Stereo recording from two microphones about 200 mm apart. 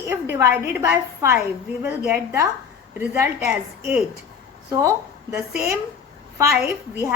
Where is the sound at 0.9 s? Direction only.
15° right (ahead or behind).